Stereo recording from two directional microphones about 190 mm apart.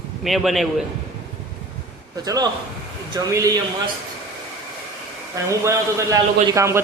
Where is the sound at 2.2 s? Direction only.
20° right (ahead or behind).